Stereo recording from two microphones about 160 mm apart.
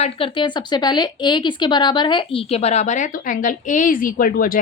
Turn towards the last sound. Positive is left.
turn(degrees=60)  # may be behind; listen again after turning